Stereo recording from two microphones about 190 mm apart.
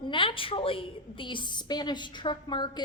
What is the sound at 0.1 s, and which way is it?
A woman's voice, 25° left (ahead or behind).